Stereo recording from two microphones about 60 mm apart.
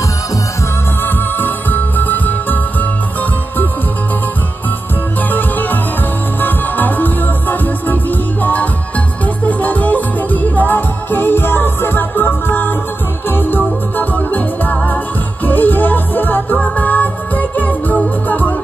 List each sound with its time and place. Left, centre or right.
1.0 s music: left
5.3 s music: left